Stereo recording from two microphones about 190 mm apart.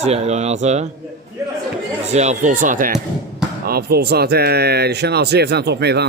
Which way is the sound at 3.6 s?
55° right (ahead or behind).